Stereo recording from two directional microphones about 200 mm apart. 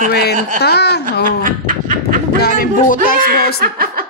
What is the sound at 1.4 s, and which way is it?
Speech, 45° right (ahead or behind).